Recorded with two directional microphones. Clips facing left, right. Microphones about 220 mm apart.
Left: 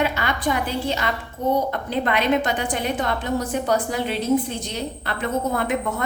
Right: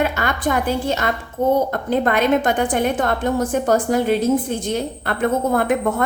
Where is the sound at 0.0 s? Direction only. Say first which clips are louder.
Right 2 dB; 50° right (ahead or behind).